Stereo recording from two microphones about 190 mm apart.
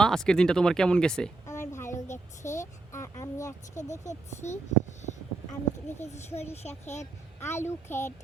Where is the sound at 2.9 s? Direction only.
15° left (ahead or behind).